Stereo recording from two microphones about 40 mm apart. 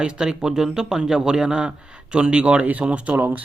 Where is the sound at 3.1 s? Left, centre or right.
Right.